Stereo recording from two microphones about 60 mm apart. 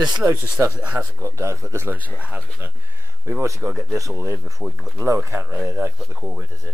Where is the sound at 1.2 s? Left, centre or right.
Right.